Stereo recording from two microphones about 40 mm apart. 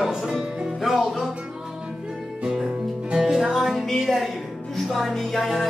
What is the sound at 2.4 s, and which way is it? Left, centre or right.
Music, centre.